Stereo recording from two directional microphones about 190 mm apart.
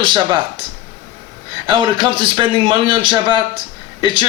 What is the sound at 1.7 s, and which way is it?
A man's voice, 25° right (ahead or behind).